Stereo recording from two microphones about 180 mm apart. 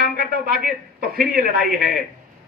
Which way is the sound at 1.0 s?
55° right (ahead or behind).